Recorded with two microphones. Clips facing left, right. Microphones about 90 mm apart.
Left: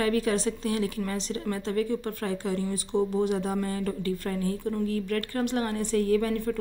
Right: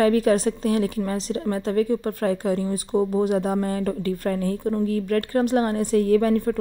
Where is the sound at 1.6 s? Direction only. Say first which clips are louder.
Right 6 dB; 45° right (ahead or behind).